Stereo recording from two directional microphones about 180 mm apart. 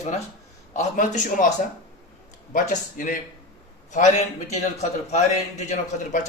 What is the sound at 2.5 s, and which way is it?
A man's voice, 45° left (ahead or behind).